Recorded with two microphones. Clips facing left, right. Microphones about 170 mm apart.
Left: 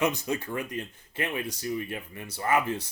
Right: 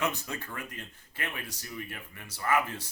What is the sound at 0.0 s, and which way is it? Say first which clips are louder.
Speech: left 6 dB; 15° left (ahead or behind).